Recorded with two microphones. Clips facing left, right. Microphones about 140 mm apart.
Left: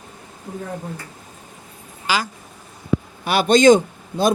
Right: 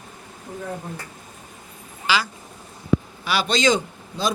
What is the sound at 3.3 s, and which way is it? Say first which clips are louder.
A man's voice: left 8 dB; 50° left (ahead or behind).